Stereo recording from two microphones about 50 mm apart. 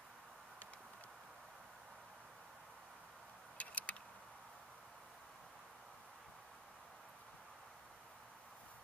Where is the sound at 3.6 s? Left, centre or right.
Left.